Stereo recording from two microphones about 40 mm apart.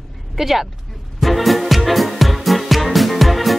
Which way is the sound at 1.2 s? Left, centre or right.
Centre.